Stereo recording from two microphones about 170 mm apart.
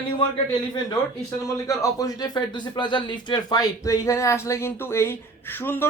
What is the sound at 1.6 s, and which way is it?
Speech, 20° left (ahead or behind).